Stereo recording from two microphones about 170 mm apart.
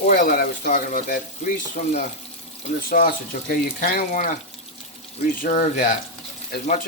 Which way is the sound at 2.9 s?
55° left (ahead or behind).